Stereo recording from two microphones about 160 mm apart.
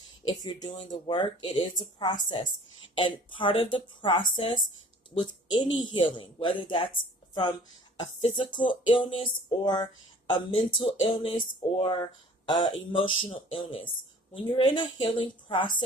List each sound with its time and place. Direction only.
0.3 s a woman's voice: 30° left (ahead or behind)
8.0 s a woman's voice: 40° left (ahead or behind)